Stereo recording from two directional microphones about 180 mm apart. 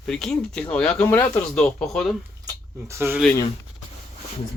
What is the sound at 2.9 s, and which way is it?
Speech, 15° right (ahead or behind).